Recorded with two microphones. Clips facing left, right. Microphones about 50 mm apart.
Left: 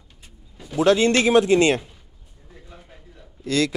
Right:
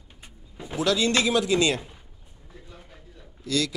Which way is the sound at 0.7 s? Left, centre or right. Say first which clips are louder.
Left 6 dB; left.